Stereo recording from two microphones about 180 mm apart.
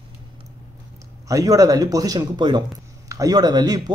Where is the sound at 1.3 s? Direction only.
20° right (ahead or behind).